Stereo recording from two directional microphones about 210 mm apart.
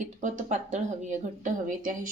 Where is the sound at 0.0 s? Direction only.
35° right (ahead or behind).